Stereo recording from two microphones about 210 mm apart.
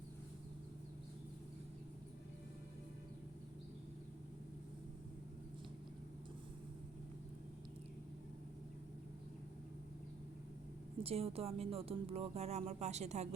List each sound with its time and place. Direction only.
11.0 s speech: 30° right (ahead or behind)